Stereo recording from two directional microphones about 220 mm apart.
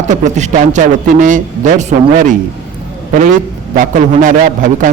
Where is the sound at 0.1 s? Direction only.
35° right (ahead or behind).